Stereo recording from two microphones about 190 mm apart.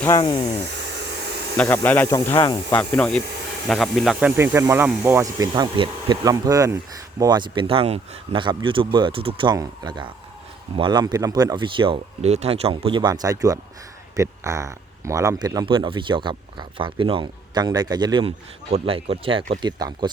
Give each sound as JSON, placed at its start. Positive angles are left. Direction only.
{"t": 0.2, "sound": "speech", "side_deg": 25}
{"t": 1.5, "sound": "speech", "side_deg": 10}